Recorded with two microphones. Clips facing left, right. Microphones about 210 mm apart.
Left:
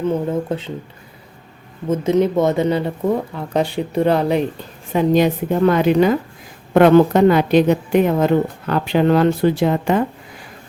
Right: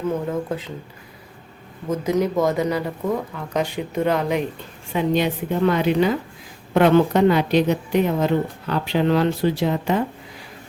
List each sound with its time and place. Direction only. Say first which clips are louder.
0.1 s speech: left 4 dB; 25° left (ahead or behind)
1.9 s a woman's voice: left 5 dB; 25° left (ahead or behind); by 10.1 s 55° left (ahead or behind)